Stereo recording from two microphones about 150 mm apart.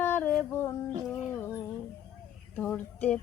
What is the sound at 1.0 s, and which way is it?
Dog, 15° left (ahead or behind).